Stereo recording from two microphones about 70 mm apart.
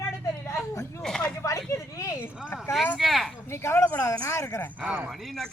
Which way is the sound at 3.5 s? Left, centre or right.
Left.